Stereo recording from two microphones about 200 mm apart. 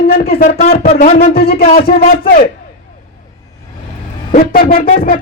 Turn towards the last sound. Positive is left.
turn(degrees=45)  # may be behind; listen again after turning